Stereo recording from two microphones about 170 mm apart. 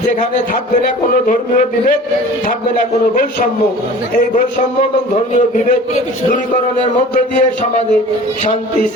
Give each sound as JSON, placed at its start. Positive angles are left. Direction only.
{"t": 0.8, "sound": "a man's voice", "side_deg": 55}
{"t": 4.8, "sound": "a man's voice", "side_deg": 45}